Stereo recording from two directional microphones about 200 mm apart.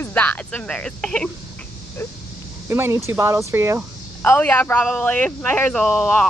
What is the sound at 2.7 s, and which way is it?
Speech, 10° right (ahead or behind).